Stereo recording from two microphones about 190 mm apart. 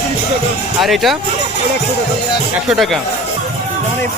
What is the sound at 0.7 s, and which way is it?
Speech, centre (ahead or behind).